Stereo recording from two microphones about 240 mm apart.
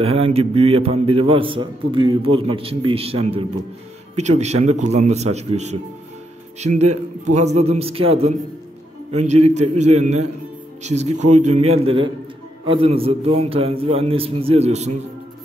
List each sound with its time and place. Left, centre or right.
0.0 s a man's voice: right